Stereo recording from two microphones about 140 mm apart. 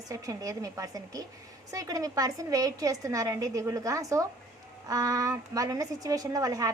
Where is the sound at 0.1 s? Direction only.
25° right (ahead or behind).